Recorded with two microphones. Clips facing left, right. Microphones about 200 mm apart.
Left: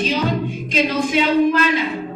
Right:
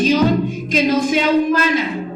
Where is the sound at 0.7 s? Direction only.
45° right (ahead or behind).